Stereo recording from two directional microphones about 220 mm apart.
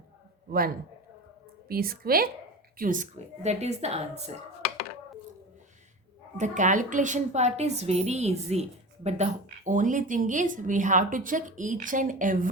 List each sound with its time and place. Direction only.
1.6 s a woman's voice: 45° right (ahead or behind)
6.3 s speech: 35° right (ahead or behind)